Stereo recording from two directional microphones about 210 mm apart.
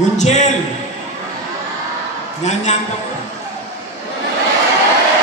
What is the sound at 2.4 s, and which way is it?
Speech, 35° left (ahead or behind).